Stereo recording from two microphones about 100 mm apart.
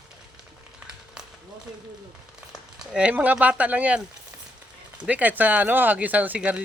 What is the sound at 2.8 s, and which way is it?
Speech, 10° right (ahead or behind).